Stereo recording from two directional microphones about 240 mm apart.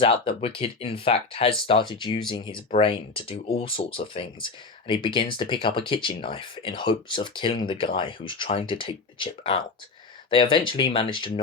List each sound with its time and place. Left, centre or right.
0.0 s speech: left